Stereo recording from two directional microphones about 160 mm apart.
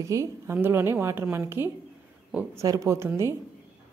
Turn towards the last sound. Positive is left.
turn(degrees=-15)  # may be behind; listen again after turning